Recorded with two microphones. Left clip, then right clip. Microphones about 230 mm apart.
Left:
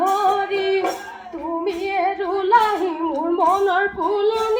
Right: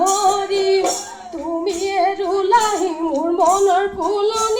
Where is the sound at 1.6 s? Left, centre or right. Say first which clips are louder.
Right 3 dB; right.